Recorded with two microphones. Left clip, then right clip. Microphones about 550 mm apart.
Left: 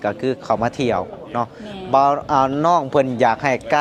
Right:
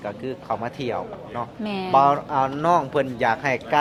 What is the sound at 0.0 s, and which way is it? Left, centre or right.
Speech, left.